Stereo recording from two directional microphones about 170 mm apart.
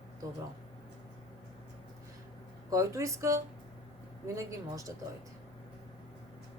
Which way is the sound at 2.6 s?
20° right (ahead or behind).